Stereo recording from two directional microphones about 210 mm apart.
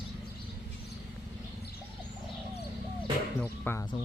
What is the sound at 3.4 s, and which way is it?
Music, 10° left (ahead or behind).